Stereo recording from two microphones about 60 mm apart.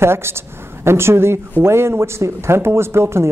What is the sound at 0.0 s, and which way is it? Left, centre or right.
A woman's voice, right.